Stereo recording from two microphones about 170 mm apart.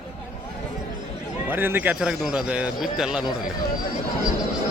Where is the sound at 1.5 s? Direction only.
10° right (ahead or behind).